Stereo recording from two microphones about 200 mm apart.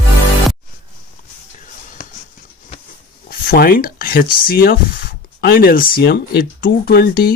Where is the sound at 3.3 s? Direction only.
45° left (ahead or behind).